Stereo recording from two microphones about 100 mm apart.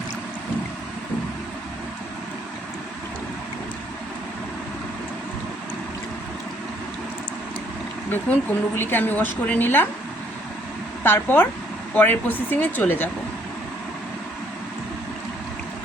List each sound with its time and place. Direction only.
8.1 s a woman's voice: 20° left (ahead or behind)
11.0 s a woman's voice: 20° left (ahead or behind)